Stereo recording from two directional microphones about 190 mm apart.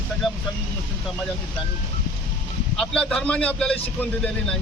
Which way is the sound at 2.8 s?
5° left (ahead or behind).